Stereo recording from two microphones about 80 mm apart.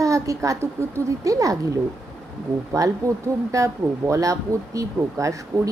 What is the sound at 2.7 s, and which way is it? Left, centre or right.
A woman's voice, right.